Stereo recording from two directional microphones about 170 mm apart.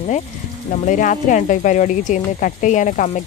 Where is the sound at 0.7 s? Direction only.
50° left (ahead or behind).